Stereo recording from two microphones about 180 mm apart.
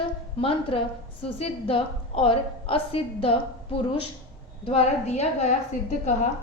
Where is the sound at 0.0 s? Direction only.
30° left (ahead or behind).